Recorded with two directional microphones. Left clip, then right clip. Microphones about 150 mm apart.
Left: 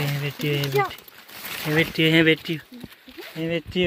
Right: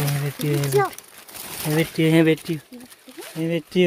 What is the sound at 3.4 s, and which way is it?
Speech, 45° right (ahead or behind).